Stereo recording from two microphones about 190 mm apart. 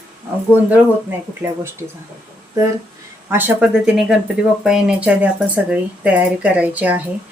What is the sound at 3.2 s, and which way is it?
Speech, 10° right (ahead or behind).